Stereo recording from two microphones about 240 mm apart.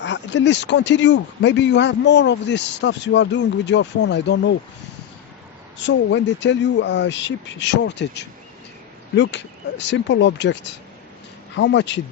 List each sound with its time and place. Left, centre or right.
0.0 s speech: left
5.8 s speech: left